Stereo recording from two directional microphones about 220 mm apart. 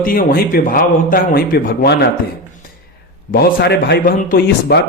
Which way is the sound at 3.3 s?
45° left (ahead or behind).